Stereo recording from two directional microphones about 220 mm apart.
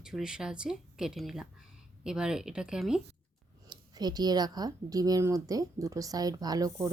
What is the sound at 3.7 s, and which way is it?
Speech, 20° right (ahead or behind).